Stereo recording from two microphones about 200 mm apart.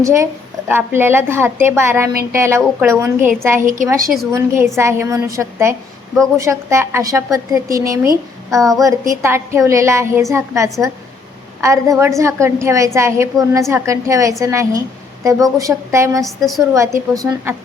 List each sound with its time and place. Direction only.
0.0 s a woman's voice: 15° right (ahead or behind)
16.2 s a woman's voice: centre (ahead or behind)
16.7 s a woman's voice: 15° right (ahead or behind)